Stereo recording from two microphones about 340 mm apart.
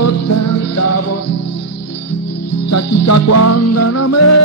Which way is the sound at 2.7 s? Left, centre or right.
Left.